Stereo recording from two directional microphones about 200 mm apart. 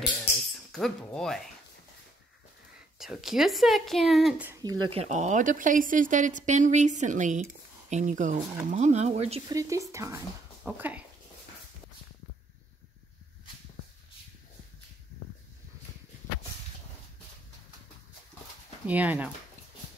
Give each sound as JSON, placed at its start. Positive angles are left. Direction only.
{"t": 0.7, "sound": "speech", "side_deg": 0}
{"t": 3.0, "sound": "speech", "side_deg": 0}
{"t": 9.5, "sound": "speech", "side_deg": -15}
{"t": 18.9, "sound": "speech", "side_deg": -10}